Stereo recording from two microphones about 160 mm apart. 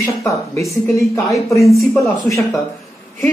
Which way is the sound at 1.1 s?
20° left (ahead or behind).